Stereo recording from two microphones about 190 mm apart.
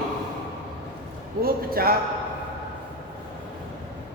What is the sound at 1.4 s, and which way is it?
Speech, 50° right (ahead or behind).